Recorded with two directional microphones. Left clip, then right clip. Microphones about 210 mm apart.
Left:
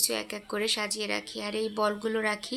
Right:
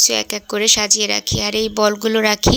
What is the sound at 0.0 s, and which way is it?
Speech, 35° right (ahead or behind).